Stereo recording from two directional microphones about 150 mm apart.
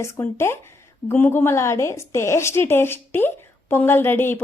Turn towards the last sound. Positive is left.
turn(degrees=15)  # may be behind; listen again after turning